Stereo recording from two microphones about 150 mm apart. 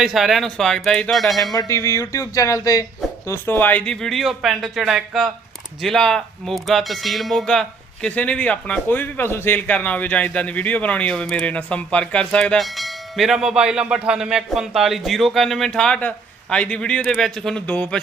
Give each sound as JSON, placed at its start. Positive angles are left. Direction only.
{"t": 0.0, "sound": "speech", "side_deg": 0}
{"t": 1.5, "sound": "speech", "side_deg": 20}